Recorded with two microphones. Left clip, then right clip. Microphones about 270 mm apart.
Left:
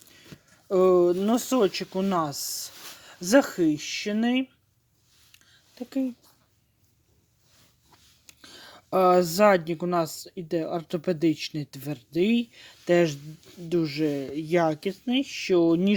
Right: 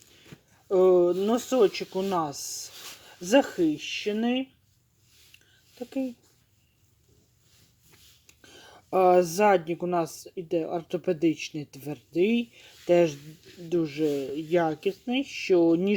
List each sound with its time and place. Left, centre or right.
0.7 s speech: left
2.7 s a sound: centre
3.2 s speech: left
8.3 s speech: left